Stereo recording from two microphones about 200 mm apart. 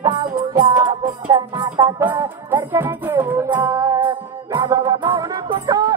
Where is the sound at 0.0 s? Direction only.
20° right (ahead or behind).